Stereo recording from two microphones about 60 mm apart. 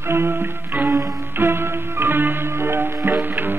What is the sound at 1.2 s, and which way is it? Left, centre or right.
Music, right.